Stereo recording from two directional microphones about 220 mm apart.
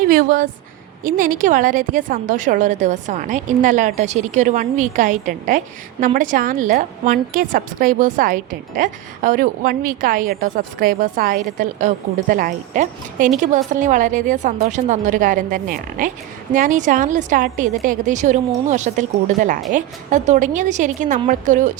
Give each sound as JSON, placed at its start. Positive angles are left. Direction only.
{"t": 0.0, "sound": "a woman's voice", "side_deg": -40}